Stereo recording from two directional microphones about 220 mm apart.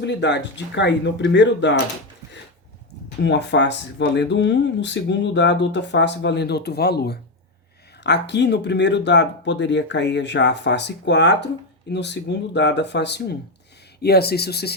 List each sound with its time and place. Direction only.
0.0 s speech: 55° left (ahead or behind)
3.2 s speech: 50° left (ahead or behind)